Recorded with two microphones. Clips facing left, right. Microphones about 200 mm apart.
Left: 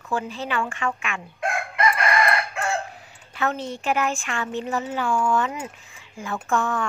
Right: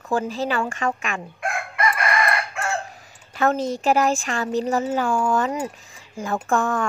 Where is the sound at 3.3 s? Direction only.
40° right (ahead or behind).